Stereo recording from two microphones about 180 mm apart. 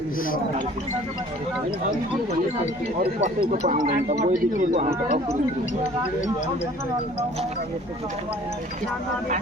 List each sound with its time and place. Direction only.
3.5 s a man's voice: 40° right (ahead or behind)